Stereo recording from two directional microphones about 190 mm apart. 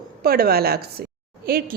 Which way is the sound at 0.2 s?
50° right (ahead or behind).